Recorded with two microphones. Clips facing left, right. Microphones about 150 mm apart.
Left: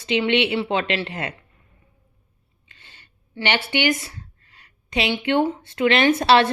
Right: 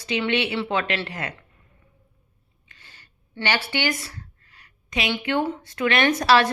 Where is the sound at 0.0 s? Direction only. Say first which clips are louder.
Left 4 dB; 25° left (ahead or behind).